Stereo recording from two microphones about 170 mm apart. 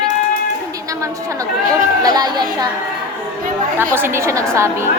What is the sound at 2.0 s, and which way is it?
Speech, 25° right (ahead or behind).